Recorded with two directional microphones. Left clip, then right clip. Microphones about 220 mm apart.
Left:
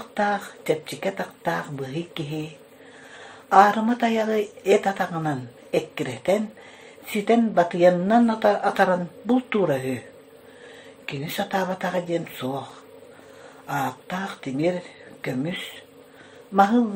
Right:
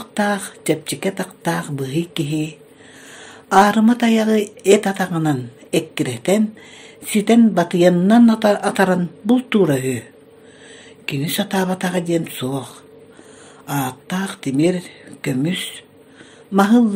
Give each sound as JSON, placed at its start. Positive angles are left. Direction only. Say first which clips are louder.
{"t": 0.1, "sound": "speech", "louder": "right 3 dB", "side_deg": -50}
{"t": 3.4, "sound": "speech", "louder": "right 3 dB", "side_deg": -50}
{"t": 11.1, "sound": "speech", "louder": "right 5 dB", "side_deg": -50}
{"t": 13.7, "sound": "speech", "louder": "right 3 dB", "side_deg": -50}